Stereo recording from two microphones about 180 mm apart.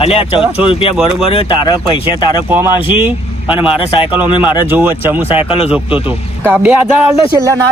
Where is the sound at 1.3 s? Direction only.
30° left (ahead or behind).